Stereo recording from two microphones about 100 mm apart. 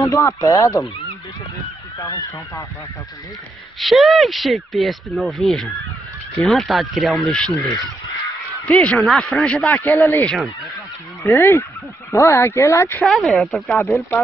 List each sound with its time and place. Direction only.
0.0 s speech: 30° left (ahead or behind)
3.8 s speech: centre (ahead or behind)
8.6 s a man's voice: 15° left (ahead or behind)
9.7 s speech: 20° left (ahead or behind)
11.2 s speech: 25° left (ahead or behind)
13.0 s speech: centre (ahead or behind)
13.7 s speech: 30° left (ahead or behind)